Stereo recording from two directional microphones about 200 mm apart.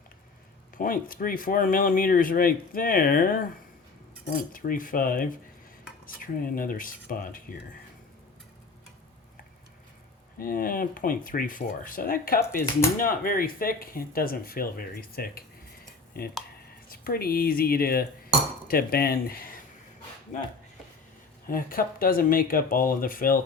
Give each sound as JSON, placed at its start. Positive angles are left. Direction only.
{"t": 0.8, "sound": "speech", "side_deg": 45}
{"t": 4.5, "sound": "speech", "side_deg": 45}
{"t": 10.3, "sound": "speech", "side_deg": 45}
{"t": 21.4, "sound": "speech", "side_deg": 45}